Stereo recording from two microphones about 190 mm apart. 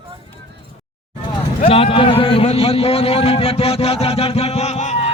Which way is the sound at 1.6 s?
30° left (ahead or behind).